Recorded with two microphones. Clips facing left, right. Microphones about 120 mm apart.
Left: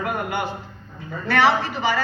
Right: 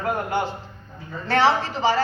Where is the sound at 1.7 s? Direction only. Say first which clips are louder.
Right 2 dB; 30° right (ahead or behind).